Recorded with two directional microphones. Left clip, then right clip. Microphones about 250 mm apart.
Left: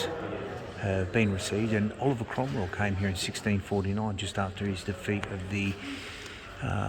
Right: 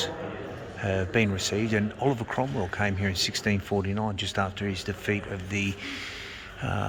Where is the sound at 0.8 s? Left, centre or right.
Centre.